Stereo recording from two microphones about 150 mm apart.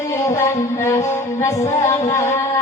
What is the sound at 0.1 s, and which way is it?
Music, 20° left (ahead or behind).